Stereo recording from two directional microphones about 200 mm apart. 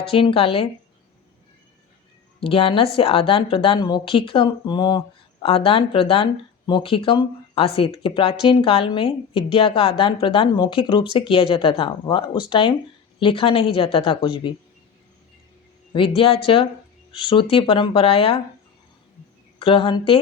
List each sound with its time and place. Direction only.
0.0 s a woman's voice: 25° left (ahead or behind)
2.4 s a woman's voice: 25° left (ahead or behind)
15.9 s a woman's voice: 25° left (ahead or behind)
19.5 s speech: 25° left (ahead or behind)